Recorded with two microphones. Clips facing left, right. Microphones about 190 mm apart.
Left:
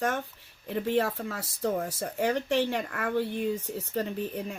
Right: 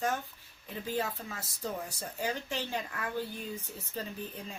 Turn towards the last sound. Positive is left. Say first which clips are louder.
# left 8 dB
turn(degrees=65)  # may be behind; listen again after turning